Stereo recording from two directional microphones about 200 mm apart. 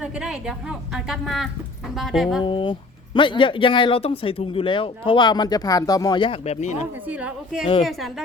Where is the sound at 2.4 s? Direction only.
25° left (ahead or behind).